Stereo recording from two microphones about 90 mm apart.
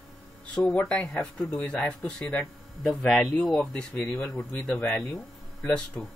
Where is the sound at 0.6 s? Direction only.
10° left (ahead or behind).